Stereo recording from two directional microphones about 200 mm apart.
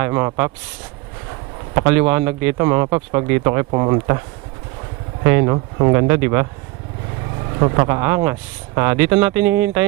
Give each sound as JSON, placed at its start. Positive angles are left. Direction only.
{"t": 0.0, "sound": "speech", "side_deg": -20}
{"t": 1.7, "sound": "speech", "side_deg": -15}
{"t": 3.7, "sound": "speech", "side_deg": -25}
{"t": 5.2, "sound": "speech", "side_deg": -15}
{"t": 7.6, "sound": "speech", "side_deg": -25}